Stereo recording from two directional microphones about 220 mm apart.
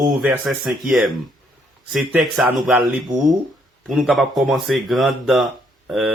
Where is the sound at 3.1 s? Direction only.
15° right (ahead or behind).